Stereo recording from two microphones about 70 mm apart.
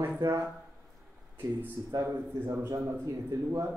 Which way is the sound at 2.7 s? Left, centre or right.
Right.